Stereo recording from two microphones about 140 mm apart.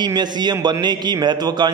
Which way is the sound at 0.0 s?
30° right (ahead or behind).